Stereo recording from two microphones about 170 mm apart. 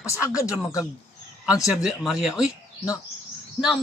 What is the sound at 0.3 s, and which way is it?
Speech, 20° left (ahead or behind).